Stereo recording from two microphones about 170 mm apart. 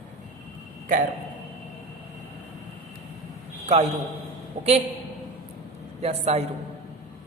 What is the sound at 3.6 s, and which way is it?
Speech, 40° right (ahead or behind).